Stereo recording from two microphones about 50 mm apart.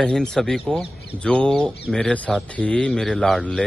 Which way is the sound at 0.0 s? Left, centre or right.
Centre.